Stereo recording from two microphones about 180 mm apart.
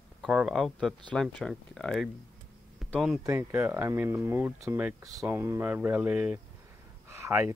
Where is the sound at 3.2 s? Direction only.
15° right (ahead or behind).